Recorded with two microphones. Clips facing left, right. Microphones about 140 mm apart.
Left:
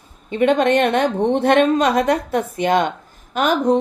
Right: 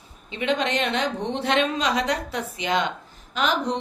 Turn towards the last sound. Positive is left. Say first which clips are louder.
# left 7 dB
turn(degrees=50)  # may be behind; listen again after turning